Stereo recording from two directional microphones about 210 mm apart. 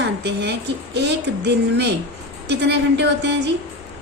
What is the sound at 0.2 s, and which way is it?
A woman's voice, 55° right (ahead or behind).